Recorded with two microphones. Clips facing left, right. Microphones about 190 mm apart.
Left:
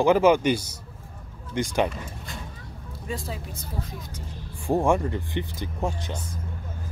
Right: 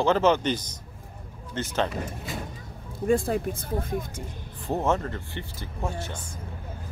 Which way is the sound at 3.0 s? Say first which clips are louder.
Right 11 dB; 50° right (ahead or behind).